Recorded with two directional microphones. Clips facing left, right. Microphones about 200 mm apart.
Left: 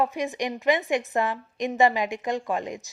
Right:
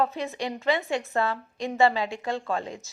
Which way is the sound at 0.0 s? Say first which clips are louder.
Left 1 dB; 15° left (ahead or behind).